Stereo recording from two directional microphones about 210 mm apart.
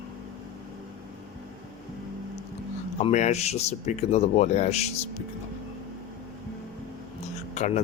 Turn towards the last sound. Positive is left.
turn(degrees=35)  # may be behind; listen again after turning